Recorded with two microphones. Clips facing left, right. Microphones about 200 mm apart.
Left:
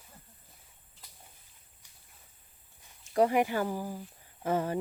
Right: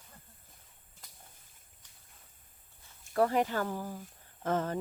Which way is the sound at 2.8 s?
15° left (ahead or behind).